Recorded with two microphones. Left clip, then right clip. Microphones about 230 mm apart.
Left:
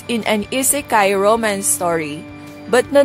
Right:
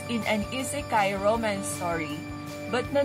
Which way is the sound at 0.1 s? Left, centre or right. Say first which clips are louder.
Left 10 dB; left.